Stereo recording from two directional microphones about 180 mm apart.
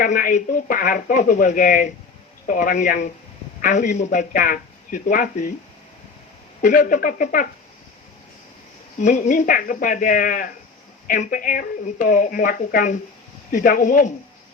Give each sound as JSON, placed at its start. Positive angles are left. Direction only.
{"t": 0.0, "sound": "speech", "side_deg": 50}
{"t": 6.6, "sound": "speech", "side_deg": 50}
{"t": 9.0, "sound": "speech", "side_deg": 40}